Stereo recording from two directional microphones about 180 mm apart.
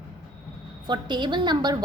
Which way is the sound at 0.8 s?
25° right (ahead or behind).